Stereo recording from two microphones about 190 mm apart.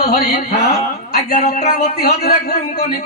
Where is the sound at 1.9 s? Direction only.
55° left (ahead or behind).